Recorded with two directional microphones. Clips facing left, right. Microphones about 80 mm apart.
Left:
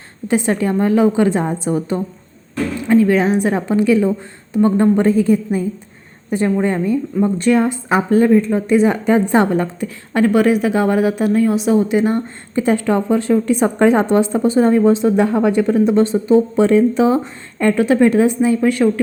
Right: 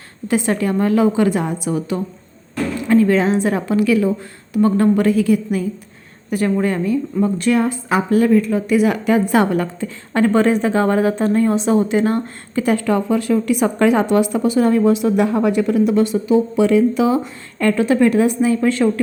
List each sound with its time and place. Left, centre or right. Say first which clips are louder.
0.3 s a woman's voice: left 1 dB; left
2.8 s a woman's voice: left 1 dB; centre
10.2 s a woman's voice: left 1 dB; centre; by 17.2 s left
17.6 s a woman's voice: left 2 dB; centre